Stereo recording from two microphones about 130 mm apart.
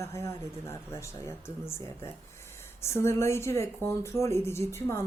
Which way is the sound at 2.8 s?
20° left (ahead or behind).